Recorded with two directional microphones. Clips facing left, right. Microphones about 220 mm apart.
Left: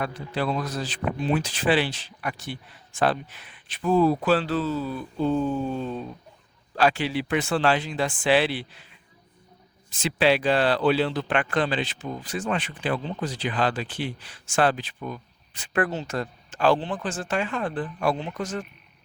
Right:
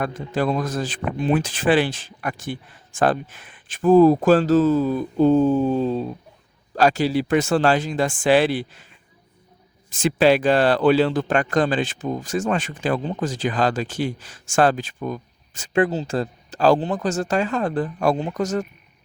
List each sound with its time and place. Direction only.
0.0 s speech: 45° right (ahead or behind)
10.0 s speech: 45° right (ahead or behind)
15.7 s speech: 30° right (ahead or behind)